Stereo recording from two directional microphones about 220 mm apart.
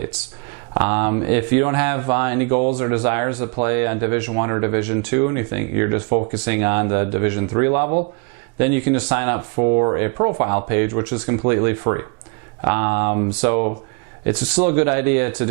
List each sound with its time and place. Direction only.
0.7 s speech: 15° right (ahead or behind)
2.5 s speech: 35° right (ahead or behind)
2.7 s speech: 15° right (ahead or behind)
9.6 s speech: 25° right (ahead or behind)